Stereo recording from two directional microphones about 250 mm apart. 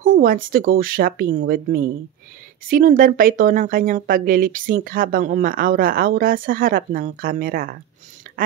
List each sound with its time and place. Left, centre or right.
0.0 s speech: right